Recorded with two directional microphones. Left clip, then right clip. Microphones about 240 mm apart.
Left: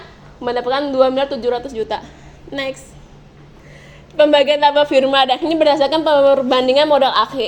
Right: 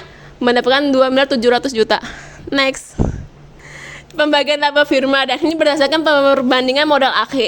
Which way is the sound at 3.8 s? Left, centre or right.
Right.